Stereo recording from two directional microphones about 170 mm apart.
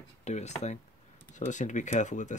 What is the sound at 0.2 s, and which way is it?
Speech, 40° left (ahead or behind).